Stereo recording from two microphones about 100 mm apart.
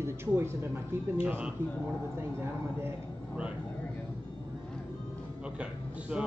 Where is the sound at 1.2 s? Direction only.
15° right (ahead or behind).